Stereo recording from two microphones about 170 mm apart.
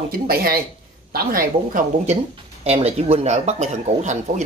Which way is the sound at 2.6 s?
35° right (ahead or behind).